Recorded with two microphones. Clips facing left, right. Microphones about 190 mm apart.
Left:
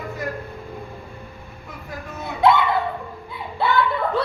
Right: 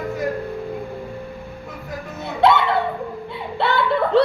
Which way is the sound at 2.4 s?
70° right (ahead or behind).